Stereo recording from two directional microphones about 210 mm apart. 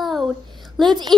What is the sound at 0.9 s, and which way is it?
Speech, 20° right (ahead or behind).